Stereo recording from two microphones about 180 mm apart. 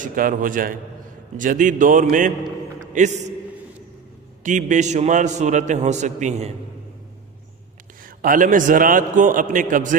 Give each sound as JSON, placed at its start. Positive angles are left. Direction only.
{"t": 0.0, "sound": "a man's voice", "side_deg": -50}
{"t": 4.4, "sound": "a man's voice", "side_deg": -45}
{"t": 8.2, "sound": "a man's voice", "side_deg": -50}